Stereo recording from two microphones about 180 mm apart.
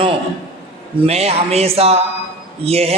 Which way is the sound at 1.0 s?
35° right (ahead or behind).